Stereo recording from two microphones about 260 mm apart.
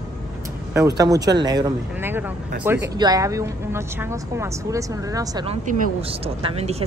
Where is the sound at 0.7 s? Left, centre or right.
Centre.